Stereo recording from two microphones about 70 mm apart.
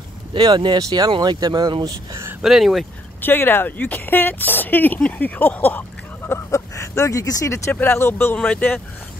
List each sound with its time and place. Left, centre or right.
0.4 s speech: right
2.4 s speech: centre
3.2 s speech: left
6.7 s speech: left
7.7 s speech: left
8.4 s speech: left